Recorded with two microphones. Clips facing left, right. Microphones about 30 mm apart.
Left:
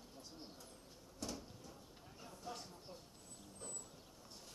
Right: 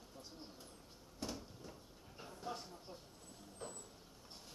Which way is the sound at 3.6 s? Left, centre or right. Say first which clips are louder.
Right 4 dB; right.